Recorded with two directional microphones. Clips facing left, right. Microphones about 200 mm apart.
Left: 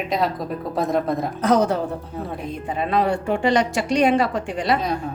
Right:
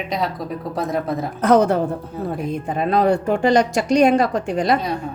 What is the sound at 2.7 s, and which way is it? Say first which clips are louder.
A woman's voice: right 3 dB; 45° right (ahead or behind).